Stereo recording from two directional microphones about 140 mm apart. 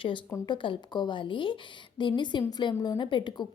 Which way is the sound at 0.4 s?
35° left (ahead or behind).